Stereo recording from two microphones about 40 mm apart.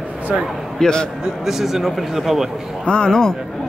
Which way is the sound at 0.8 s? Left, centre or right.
Centre.